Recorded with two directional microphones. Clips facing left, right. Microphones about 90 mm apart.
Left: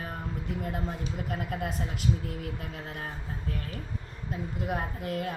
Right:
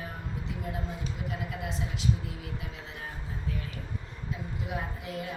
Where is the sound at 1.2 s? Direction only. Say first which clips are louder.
Left 4 dB; 50° left (ahead or behind).